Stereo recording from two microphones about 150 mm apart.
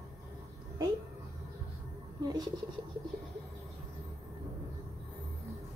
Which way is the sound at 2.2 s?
25° right (ahead or behind).